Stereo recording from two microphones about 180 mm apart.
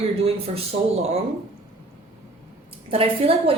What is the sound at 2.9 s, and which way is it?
Speech, 30° right (ahead or behind).